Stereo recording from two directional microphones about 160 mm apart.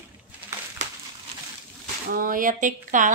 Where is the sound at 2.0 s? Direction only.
60° right (ahead or behind).